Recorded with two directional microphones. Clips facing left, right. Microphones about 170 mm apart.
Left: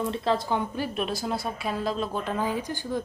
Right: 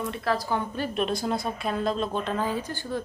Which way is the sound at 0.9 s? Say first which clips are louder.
Right 5 dB; 5° left (ahead or behind).